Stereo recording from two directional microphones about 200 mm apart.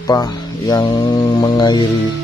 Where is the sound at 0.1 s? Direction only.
20° left (ahead or behind).